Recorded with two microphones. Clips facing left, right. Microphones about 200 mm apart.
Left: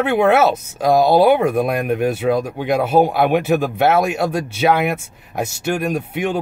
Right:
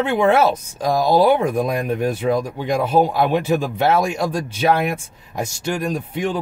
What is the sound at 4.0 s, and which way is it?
Speech, 5° left (ahead or behind).